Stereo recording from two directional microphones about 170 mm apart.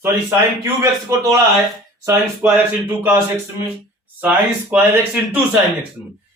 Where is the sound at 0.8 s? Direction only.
20° right (ahead or behind).